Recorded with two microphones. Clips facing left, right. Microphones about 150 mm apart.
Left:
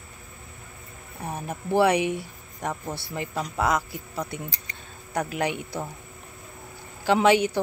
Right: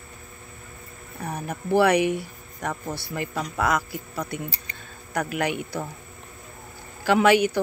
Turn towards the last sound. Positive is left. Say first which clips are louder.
# right 1 dB
turn(degrees=25)  # may be behind; listen again after turning